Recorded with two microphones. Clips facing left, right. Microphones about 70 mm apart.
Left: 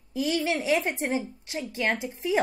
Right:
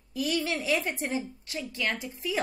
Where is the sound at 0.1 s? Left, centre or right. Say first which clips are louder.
Left 3 dB; left.